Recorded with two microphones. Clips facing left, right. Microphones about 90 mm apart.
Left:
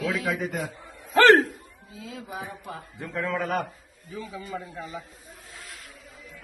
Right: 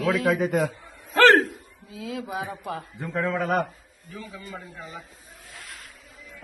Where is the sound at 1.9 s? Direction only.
90° right.